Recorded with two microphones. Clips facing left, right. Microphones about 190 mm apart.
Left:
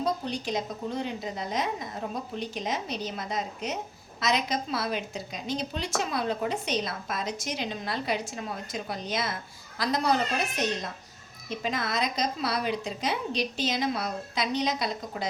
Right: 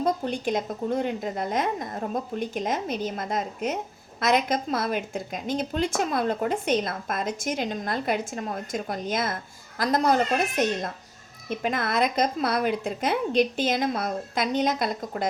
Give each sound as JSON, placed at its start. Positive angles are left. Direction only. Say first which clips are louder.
{"t": 0.0, "sound": "a woman's voice", "louder": "right 4 dB", "side_deg": -50}